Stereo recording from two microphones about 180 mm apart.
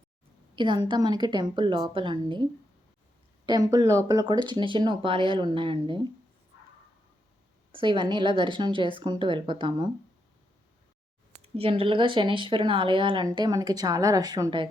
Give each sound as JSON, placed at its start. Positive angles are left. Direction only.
{"t": 0.5, "sound": "speech", "side_deg": -25}
{"t": 3.4, "sound": "speech", "side_deg": -20}
{"t": 7.7, "sound": "speech", "side_deg": -25}
{"t": 11.4, "sound": "speech", "side_deg": -30}